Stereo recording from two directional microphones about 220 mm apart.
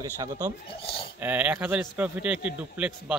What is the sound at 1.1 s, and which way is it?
A man's voice, 10° right (ahead or behind).